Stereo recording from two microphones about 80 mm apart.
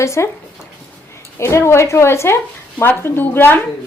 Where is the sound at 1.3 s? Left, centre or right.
Left.